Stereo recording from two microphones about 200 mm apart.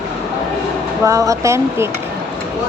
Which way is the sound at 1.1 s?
15° right (ahead or behind).